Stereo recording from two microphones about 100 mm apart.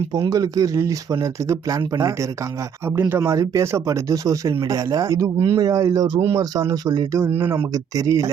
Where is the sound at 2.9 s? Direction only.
20° right (ahead or behind); by 6.2 s 45° right (ahead or behind).